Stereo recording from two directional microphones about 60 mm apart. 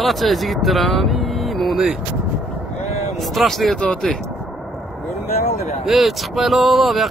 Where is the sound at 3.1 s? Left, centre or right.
Centre.